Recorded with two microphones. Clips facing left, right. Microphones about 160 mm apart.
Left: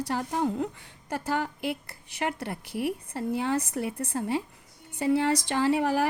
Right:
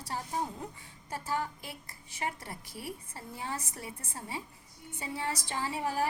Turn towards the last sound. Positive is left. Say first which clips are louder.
# left 8 dB
turn(degrees=75)  # may be behind; listen again after turning